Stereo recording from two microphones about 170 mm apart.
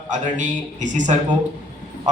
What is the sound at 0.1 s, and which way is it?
A man's voice, 45° right (ahead or behind).